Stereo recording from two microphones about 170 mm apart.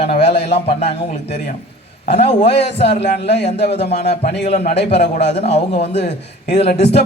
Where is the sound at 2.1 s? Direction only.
40° left (ahead or behind).